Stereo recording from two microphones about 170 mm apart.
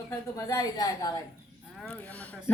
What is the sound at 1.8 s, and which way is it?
Speech, 10° left (ahead or behind).